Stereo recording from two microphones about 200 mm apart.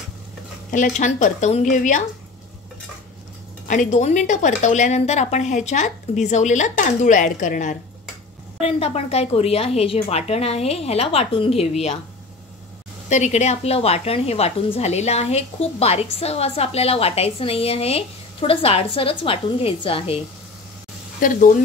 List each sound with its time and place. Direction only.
0.7 s a woman's voice: 40° left (ahead or behind)
3.6 s a woman's voice: 40° left (ahead or behind)
8.5 s a woman's voice: 30° left (ahead or behind)
13.1 s a woman's voice: 35° left (ahead or behind)
21.2 s speech: 40° left (ahead or behind)